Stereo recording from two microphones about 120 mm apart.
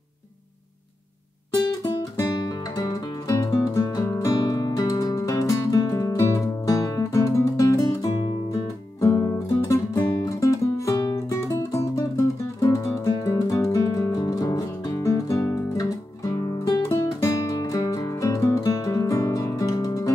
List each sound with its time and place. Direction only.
2.4 s music: 30° left (ahead or behind)